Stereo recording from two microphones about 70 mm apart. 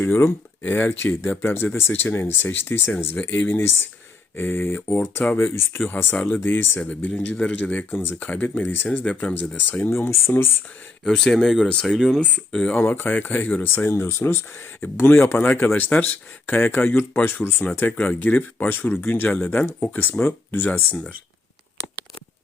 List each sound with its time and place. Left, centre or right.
0.0 s speech: left
9.9 s speech: left
11.0 s speech: centre
12.8 s speech: left
17.9 s speech: centre